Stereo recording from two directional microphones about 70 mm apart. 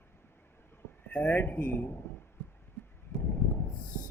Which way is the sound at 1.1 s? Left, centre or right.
Left.